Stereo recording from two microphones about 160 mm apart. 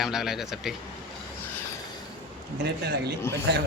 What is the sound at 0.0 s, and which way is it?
Speech, 5° right (ahead or behind).